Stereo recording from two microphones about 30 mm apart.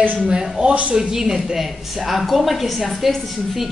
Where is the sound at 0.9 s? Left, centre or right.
Centre.